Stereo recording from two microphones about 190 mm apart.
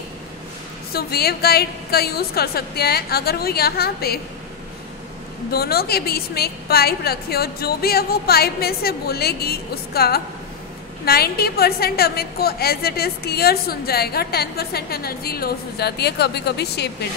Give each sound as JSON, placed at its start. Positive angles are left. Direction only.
{"t": 0.9, "sound": "a woman's voice", "side_deg": 55}
{"t": 5.5, "sound": "a woman's voice", "side_deg": 55}